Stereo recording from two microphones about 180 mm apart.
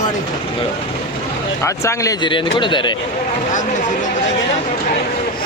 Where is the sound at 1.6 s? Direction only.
15° left (ahead or behind).